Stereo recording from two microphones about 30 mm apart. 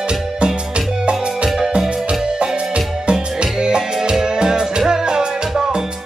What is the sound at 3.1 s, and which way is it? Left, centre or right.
Music, right.